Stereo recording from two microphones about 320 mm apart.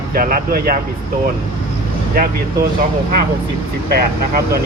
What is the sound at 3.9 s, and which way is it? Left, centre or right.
Speech, right.